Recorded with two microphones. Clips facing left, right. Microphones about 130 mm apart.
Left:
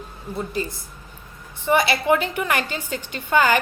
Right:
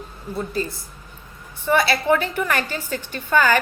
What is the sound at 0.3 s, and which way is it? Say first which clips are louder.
A woman's voice: right 1 dB; 15° left (ahead or behind).